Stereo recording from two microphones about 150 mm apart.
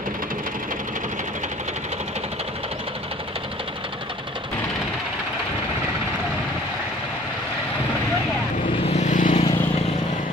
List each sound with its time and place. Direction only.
8.8 s vehicle: 50° left (ahead or behind)
9.3 s vehicle: 40° left (ahead or behind)